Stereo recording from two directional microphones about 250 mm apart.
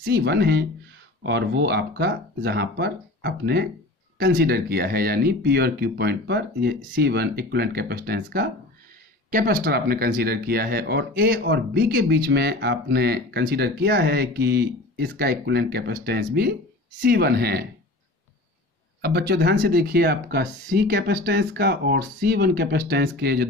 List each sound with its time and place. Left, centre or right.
0.0 s speech: right
18.9 s speech: right